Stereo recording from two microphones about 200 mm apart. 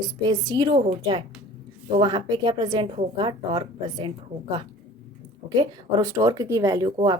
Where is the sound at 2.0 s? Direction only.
20° right (ahead or behind).